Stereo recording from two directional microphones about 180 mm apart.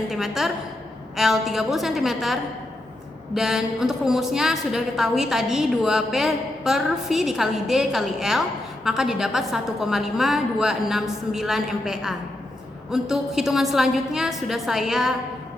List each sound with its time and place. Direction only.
0.1 s a woman's voice: centre (ahead or behind)